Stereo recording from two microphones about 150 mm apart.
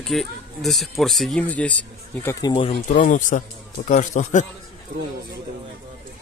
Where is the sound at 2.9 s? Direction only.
60° left (ahead or behind).